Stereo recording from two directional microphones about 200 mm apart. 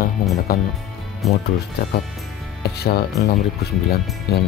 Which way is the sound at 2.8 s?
55° left (ahead or behind).